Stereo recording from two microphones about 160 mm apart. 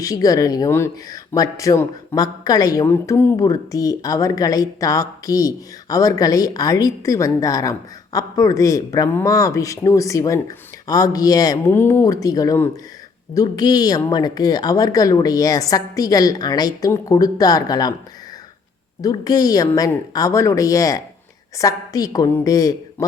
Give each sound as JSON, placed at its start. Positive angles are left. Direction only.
{"t": 0.0, "sound": "speech", "side_deg": 20}
{"t": 19.0, "sound": "speech", "side_deg": 25}